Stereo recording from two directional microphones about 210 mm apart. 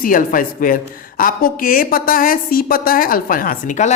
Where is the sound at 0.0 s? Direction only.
40° left (ahead or behind).